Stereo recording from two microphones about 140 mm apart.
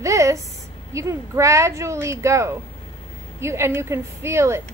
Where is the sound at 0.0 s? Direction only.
20° right (ahead or behind).